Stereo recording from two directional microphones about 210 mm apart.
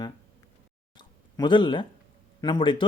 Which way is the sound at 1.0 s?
20° left (ahead or behind).